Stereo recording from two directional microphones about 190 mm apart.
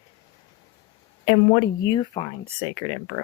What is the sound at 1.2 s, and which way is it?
Speech, 25° left (ahead or behind).